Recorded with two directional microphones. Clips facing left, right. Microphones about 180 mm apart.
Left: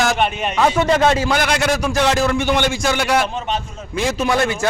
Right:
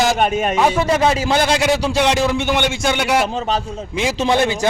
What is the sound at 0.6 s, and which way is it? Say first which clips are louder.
Speech: left 2 dB; 15° right (ahead or behind).